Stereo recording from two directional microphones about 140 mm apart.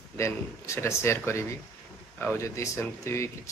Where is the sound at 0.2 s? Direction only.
20° left (ahead or behind).